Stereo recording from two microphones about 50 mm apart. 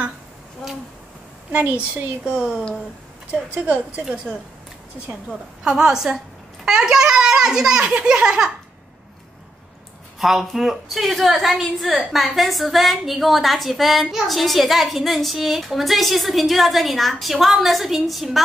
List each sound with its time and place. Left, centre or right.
1.5 s a woman's voice: right
2.2 s speech: right
5.6 s a child's voice: centre
8.0 s laughter: centre
10.1 s a woman's voice: centre